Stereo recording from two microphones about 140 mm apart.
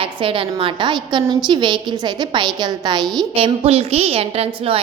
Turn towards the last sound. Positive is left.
turn(degrees=-45)  # may be behind; listen again after turning